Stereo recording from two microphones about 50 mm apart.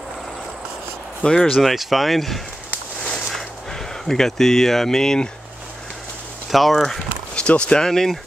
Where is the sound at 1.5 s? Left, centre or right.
Centre.